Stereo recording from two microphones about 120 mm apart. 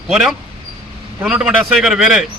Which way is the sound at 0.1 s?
5° right (ahead or behind).